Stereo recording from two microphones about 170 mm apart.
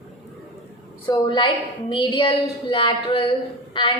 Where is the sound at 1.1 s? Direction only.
30° left (ahead or behind).